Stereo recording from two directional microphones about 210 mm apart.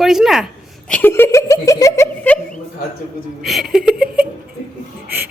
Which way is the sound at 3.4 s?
Centre (ahead or behind).